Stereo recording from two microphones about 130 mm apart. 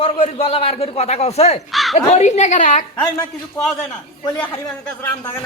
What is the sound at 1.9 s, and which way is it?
Speech, 60° left (ahead or behind).